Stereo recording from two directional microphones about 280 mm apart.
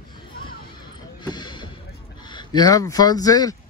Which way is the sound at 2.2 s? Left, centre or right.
Centre.